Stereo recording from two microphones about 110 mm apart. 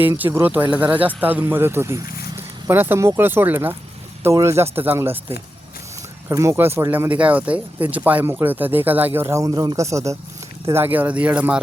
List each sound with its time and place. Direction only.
0.3 s speech: 20° right (ahead or behind)
6.2 s speech: 25° right (ahead or behind)
9.5 s speech: 35° right (ahead or behind); by 11.6 s 15° right (ahead or behind)